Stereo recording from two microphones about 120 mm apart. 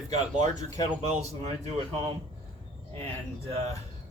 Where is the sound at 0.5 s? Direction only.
30° left (ahead or behind).